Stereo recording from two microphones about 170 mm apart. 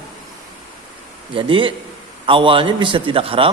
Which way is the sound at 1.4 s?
30° right (ahead or behind).